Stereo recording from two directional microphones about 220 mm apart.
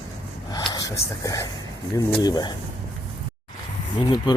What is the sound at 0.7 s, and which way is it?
Speech, 15° left (ahead or behind).